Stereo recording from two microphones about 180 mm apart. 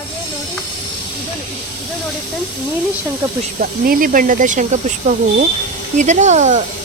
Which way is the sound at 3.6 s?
50° right (ahead or behind).